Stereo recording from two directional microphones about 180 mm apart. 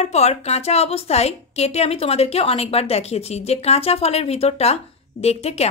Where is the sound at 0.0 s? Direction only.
35° left (ahead or behind).